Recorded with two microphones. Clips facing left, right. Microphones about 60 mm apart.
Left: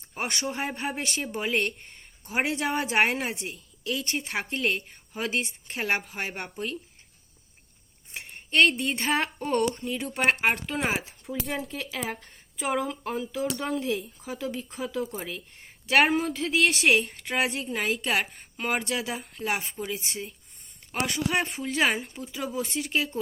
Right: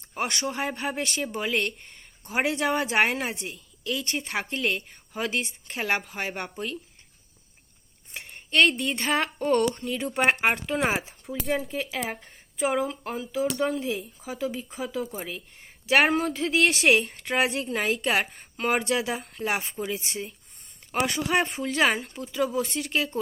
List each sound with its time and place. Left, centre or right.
0.1 s a woman's voice: centre
8.1 s a woman's voice: centre
11.7 s a woman's voice: centre